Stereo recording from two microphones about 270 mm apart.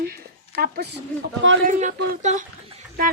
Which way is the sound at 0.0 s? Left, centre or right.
Right.